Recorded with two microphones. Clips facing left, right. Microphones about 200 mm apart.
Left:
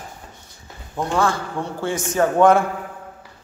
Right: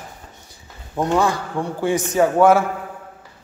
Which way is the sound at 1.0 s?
15° right (ahead or behind).